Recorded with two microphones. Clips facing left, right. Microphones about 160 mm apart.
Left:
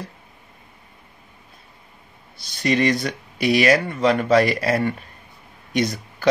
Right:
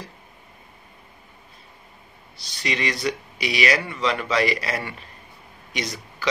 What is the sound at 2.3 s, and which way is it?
Speech, 50° left (ahead or behind).